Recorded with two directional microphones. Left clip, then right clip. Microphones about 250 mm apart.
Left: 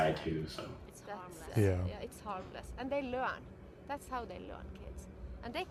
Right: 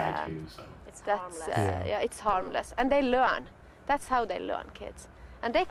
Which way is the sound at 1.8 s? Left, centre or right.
Right.